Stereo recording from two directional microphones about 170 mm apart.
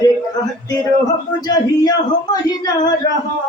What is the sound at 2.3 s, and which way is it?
Speech, 20° left (ahead or behind).